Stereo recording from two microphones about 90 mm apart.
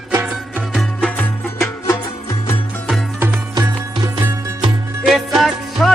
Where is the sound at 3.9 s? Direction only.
50° right (ahead or behind).